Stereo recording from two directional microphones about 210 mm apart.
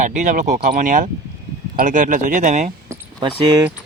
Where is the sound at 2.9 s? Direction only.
20° right (ahead or behind).